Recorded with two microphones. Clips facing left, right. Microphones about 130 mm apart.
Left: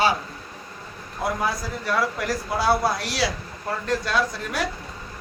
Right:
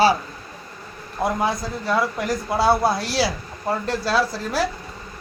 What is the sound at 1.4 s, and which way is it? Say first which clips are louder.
A man's voice: right 3 dB; 25° right (ahead or behind).